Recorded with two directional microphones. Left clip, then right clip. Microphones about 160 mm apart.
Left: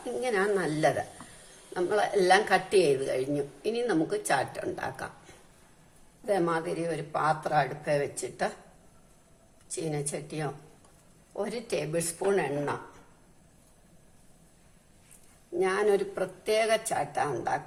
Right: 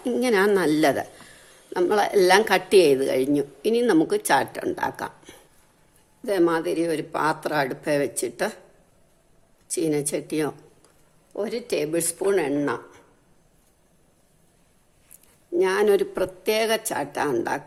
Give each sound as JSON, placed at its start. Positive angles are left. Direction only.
{"t": 0.2, "sound": "a woman's voice", "side_deg": -75}
{"t": 6.2, "sound": "speech", "side_deg": -75}
{"t": 9.6, "sound": "speech", "side_deg": -80}
{"t": 11.3, "sound": "a woman's voice", "side_deg": -60}
{"t": 15.5, "sound": "a woman's voice", "side_deg": -75}